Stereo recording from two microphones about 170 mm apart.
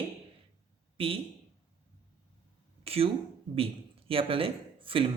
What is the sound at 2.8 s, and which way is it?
Speech, 35° right (ahead or behind).